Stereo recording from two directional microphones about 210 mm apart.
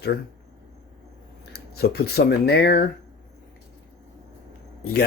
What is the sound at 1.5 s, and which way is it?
Speech, 50° left (ahead or behind).